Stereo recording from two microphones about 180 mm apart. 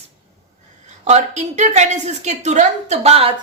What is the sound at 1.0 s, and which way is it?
A woman's voice, 40° right (ahead or behind).